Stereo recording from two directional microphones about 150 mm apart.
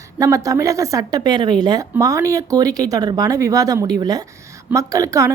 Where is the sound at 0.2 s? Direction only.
20° right (ahead or behind).